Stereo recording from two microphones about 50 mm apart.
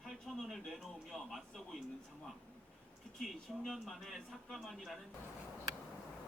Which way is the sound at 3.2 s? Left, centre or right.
Centre.